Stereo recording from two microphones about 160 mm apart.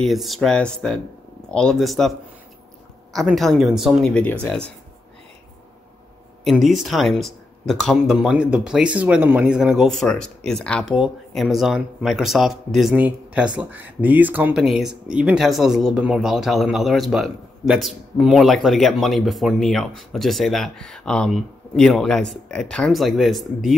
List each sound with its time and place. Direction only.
0.0 s speech: centre (ahead or behind)
6.4 s speech: centre (ahead or behind)